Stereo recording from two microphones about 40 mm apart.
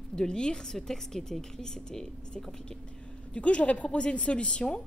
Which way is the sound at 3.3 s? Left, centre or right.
Left.